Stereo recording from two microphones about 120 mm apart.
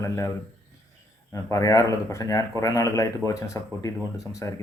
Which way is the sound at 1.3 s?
30° left (ahead or behind).